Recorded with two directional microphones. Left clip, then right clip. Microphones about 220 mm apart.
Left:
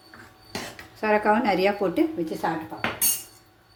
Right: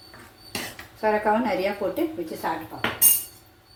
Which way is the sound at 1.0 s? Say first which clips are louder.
Even; 45° left (ahead or behind).